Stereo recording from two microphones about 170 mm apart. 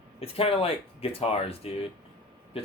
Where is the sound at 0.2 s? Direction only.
35° left (ahead or behind).